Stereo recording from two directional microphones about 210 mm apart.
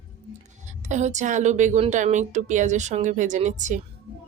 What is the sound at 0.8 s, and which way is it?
A woman's voice, 35° right (ahead or behind).